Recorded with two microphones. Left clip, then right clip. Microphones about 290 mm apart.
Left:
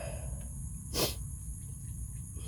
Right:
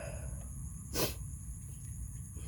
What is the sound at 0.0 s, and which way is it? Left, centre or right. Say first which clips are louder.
Cricket: left 3 dB; centre.